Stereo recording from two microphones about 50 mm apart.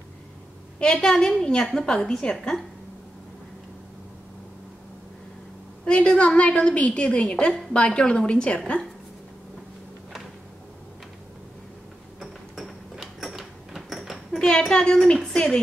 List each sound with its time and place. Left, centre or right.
0.7 s a woman's voice: centre
5.9 s a woman's voice: left
12.2 s a sound: centre
14.7 s a woman's voice: centre